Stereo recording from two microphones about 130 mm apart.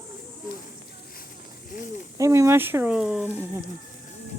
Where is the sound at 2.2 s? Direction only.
25° right (ahead or behind); by 3.3 s 5° right (ahead or behind).